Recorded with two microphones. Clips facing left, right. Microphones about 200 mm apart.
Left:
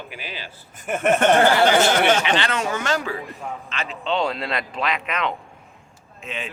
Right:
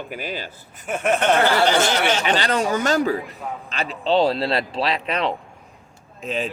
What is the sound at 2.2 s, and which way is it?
Speech, 40° right (ahead or behind).